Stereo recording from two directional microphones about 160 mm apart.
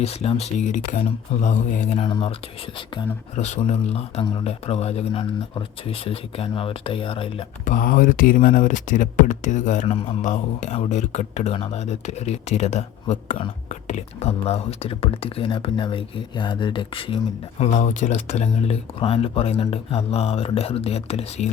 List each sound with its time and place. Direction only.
0.0 s speech: 40° left (ahead or behind)
7.6 s speech: 55° left (ahead or behind); by 17.2 s 35° left (ahead or behind)
17.6 s speech: 50° left (ahead or behind)